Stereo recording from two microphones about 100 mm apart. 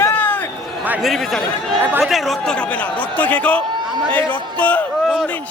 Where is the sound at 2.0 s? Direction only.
Centre (ahead or behind).